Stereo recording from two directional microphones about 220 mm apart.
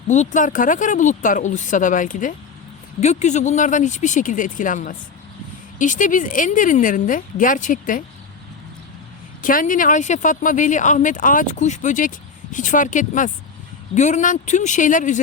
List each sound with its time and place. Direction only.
0.1 s speech: 35° left (ahead or behind)
9.4 s speech: 40° left (ahead or behind)